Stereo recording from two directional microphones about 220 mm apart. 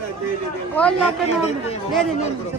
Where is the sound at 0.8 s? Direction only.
5° left (ahead or behind).